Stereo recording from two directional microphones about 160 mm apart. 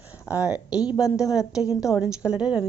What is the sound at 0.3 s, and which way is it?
A woman's voice, 10° right (ahead or behind).